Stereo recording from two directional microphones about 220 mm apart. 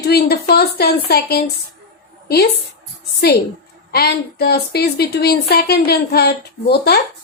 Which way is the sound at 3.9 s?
45° left (ahead or behind).